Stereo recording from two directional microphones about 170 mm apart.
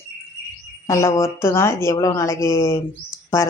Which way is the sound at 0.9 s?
15° left (ahead or behind).